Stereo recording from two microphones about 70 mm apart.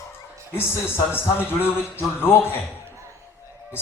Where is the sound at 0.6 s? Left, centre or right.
Left.